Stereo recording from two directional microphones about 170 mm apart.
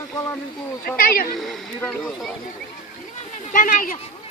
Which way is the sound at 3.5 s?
50° left (ahead or behind).